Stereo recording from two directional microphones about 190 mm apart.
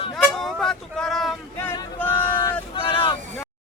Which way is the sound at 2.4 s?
25° left (ahead or behind).